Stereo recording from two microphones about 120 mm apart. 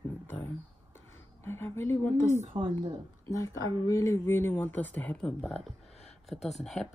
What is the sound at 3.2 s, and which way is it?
Speech, 25° left (ahead or behind).